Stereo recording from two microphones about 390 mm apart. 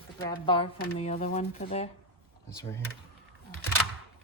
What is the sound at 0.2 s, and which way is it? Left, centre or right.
A woman's voice, centre.